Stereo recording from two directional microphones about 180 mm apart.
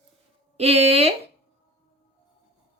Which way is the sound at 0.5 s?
35° right (ahead or behind).